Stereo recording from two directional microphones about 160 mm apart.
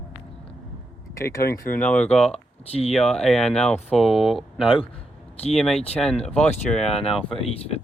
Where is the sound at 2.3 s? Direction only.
40° left (ahead or behind).